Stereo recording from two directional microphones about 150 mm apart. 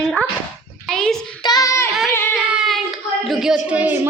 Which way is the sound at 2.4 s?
5° right (ahead or behind).